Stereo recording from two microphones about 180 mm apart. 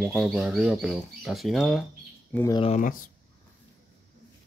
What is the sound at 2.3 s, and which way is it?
Speech, 15° left (ahead or behind).